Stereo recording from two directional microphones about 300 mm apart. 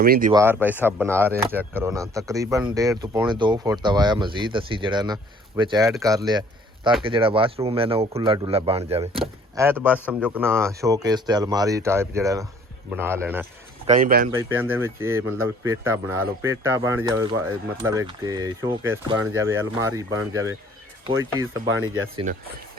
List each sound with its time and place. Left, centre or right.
0.0 s speech: right
0.3 s speech: centre
9.6 s speech: centre
13.8 s speech: right
14.3 s speech: centre
21.7 s speech: right
22.1 s speech: right